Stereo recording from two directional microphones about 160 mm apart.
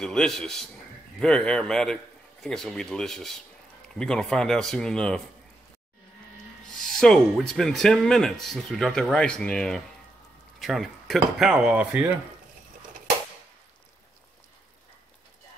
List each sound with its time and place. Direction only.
0.0 s speech: 5° left (ahead or behind)
6.8 s speech: centre (ahead or behind)